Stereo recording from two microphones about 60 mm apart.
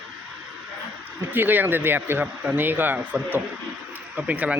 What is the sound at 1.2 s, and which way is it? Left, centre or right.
Speech, right.